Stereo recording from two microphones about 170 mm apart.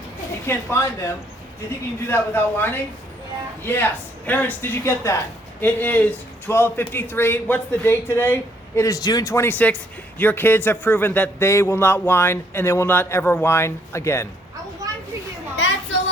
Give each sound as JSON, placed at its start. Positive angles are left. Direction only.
{"t": 0.4, "sound": "a man's voice", "side_deg": 15}
{"t": 14.8, "sound": "children playing", "side_deg": -20}
{"t": 15.5, "sound": "a sound", "side_deg": 90}